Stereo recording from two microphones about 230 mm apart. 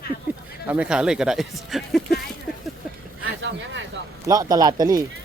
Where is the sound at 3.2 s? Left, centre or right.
Right.